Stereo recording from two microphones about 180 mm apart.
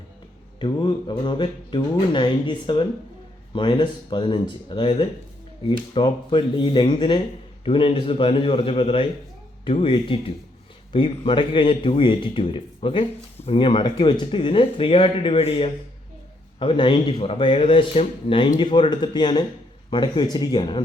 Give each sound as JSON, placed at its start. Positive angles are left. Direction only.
{"t": 0.6, "sound": "a man's voice", "side_deg": 25}